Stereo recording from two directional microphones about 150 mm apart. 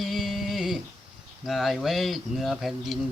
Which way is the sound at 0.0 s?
Centre (ahead or behind).